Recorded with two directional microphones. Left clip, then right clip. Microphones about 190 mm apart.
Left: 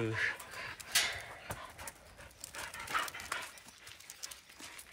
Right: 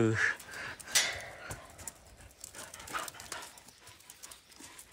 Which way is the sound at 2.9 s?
20° right (ahead or behind).